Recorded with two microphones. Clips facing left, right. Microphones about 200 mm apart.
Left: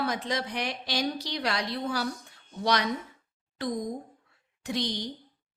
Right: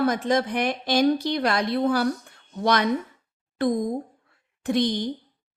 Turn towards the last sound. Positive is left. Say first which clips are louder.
# right 8 dB
turn(degrees=-50)  # may be behind; listen again after turning